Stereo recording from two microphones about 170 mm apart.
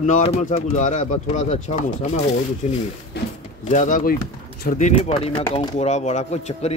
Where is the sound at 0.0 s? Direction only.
40° left (ahead or behind).